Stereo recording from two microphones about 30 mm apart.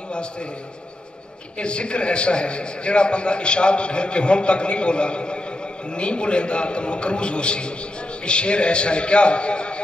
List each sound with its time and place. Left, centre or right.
1.6 s a man's voice: left